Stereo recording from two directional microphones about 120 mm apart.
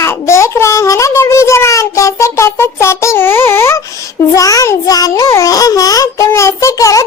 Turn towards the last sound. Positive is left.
turn(degrees=25)  # may be behind; listen again after turning